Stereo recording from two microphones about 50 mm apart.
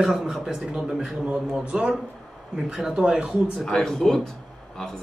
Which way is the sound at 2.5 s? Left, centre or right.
Centre.